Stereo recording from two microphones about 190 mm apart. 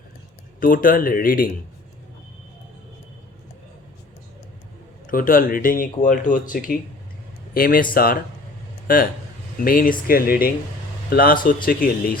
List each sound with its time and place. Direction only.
0.6 s speech: 45° left (ahead or behind)
5.0 s speech: 45° left (ahead or behind)
9.6 s speech: 50° left (ahead or behind)